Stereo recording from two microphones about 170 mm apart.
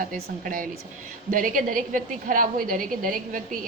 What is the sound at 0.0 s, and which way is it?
A woman's voice, 50° right (ahead or behind).